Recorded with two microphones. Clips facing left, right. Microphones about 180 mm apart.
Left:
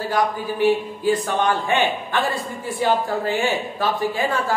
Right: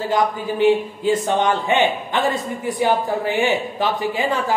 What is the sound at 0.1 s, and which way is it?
A man's voice, 20° right (ahead or behind).